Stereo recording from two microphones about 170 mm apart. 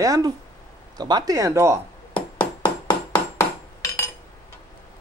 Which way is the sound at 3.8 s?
15° left (ahead or behind).